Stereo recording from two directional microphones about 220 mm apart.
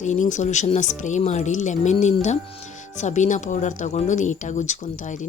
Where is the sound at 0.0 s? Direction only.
35° left (ahead or behind).